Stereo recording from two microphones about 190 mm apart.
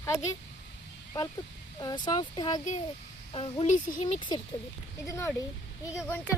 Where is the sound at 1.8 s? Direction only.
20° left (ahead or behind).